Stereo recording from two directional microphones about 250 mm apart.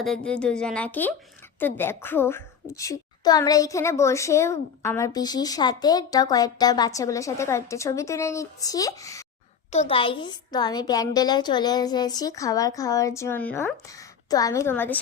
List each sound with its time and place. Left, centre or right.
0.0 s a woman's voice: centre